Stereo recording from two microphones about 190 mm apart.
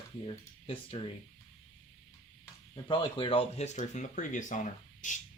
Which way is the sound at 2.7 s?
25° left (ahead or behind).